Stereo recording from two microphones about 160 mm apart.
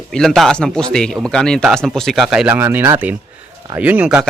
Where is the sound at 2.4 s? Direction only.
15° right (ahead or behind).